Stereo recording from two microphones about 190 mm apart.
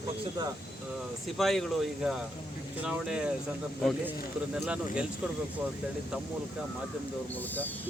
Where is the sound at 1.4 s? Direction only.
Centre (ahead or behind).